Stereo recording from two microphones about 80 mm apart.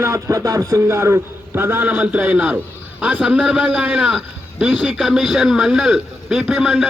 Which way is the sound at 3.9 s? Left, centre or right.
Centre.